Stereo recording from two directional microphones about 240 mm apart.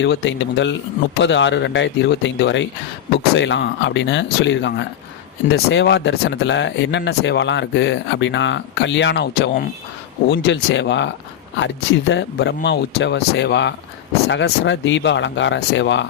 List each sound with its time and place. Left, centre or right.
0.0 s speech: left